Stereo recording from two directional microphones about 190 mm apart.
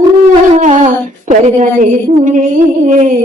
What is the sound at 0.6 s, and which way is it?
Speech, 40° right (ahead or behind).